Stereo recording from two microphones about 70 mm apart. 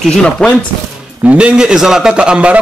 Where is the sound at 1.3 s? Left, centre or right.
Centre.